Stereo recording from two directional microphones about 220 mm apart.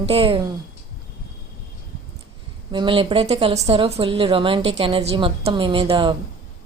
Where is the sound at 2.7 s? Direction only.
20° right (ahead or behind).